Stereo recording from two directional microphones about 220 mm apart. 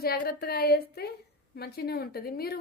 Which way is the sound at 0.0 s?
45° left (ahead or behind).